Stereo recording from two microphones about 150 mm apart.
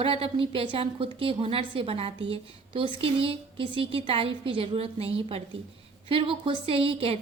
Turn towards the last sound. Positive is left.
turn(degrees=-40)  # may be behind; listen again after turning